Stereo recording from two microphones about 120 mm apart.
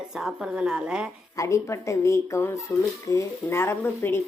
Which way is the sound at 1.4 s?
25° left (ahead or behind).